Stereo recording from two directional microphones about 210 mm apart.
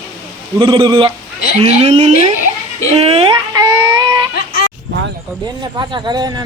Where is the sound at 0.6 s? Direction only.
20° right (ahead or behind).